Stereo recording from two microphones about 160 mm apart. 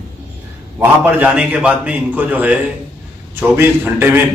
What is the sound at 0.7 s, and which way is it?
A man's voice, 10° right (ahead or behind).